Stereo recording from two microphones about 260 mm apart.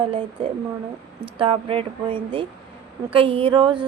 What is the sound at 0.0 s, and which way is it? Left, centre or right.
Speech, centre.